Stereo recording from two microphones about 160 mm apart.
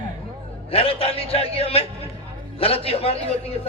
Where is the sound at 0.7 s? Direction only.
35° left (ahead or behind).